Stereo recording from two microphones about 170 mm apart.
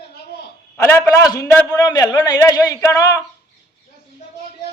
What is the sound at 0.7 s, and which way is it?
A man's voice, 15° left (ahead or behind).